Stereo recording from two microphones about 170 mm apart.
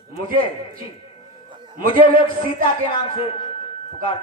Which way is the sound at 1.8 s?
55° right (ahead or behind).